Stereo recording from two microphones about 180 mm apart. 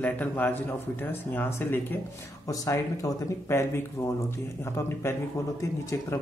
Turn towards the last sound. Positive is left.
turn(degrees=15)  # may be behind; listen again after turning